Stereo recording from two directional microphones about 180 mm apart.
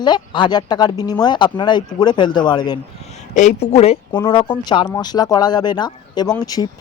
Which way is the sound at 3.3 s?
40° left (ahead or behind).